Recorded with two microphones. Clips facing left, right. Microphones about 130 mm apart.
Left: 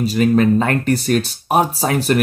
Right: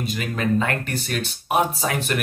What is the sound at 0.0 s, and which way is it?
Speech, 35° left (ahead or behind).